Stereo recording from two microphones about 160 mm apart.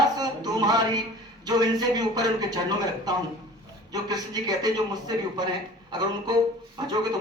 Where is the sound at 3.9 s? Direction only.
25° right (ahead or behind).